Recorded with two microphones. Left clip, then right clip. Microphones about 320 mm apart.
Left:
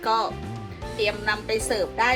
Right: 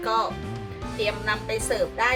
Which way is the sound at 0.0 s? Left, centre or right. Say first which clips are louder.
Left 1 dB; centre.